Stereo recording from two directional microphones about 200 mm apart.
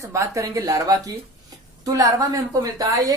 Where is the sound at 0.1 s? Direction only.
15° right (ahead or behind).